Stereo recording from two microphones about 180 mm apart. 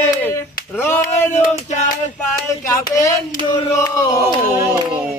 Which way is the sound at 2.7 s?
15° left (ahead or behind).